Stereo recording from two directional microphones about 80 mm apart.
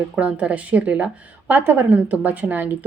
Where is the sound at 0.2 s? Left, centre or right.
Centre.